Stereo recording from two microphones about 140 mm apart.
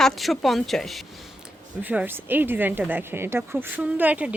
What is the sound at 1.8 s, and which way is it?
A woman's voice, 15° right (ahead or behind).